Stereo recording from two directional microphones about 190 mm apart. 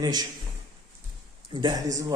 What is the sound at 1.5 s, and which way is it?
Speech, 20° right (ahead or behind).